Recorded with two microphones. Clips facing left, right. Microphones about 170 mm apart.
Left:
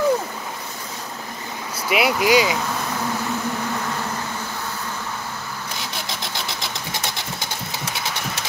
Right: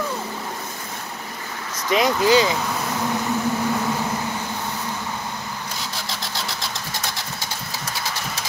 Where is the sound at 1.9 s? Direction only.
10° left (ahead or behind).